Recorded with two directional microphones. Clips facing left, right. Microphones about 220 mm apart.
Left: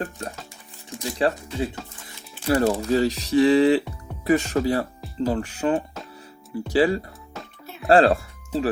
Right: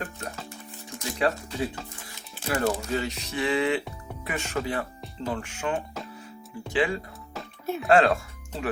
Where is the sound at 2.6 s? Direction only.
35° left (ahead or behind).